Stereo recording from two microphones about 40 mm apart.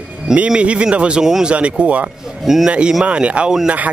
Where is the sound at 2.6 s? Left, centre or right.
Right.